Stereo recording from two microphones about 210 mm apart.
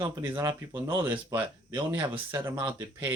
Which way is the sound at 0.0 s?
15° right (ahead or behind).